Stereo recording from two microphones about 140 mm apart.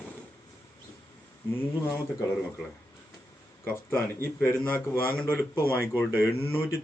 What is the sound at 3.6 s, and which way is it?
Speech, 15° left (ahead or behind).